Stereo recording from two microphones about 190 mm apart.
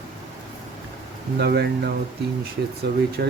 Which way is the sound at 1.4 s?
60° right (ahead or behind).